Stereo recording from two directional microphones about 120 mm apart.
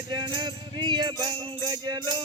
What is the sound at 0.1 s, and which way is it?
Music, 35° right (ahead or behind).